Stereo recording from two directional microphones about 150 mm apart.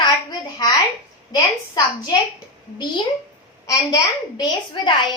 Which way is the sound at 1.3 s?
25° left (ahead or behind).